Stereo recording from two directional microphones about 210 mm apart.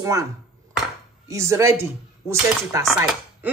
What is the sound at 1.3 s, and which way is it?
Speech, 15° right (ahead or behind).